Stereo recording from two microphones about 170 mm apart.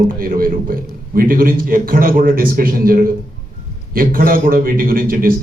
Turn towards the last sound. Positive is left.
turn(degrees=-55)  # may be behind; listen again after turning